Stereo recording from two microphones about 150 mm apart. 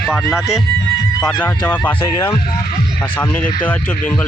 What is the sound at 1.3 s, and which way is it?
Speech, 10° left (ahead or behind).